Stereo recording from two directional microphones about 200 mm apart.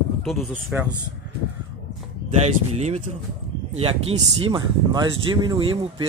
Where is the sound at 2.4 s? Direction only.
30° right (ahead or behind).